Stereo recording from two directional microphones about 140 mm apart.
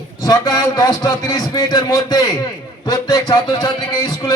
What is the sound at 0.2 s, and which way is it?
Speech, 30° left (ahead or behind).